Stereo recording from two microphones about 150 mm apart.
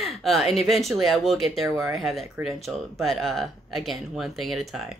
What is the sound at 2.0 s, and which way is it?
A woman's voice, centre (ahead or behind).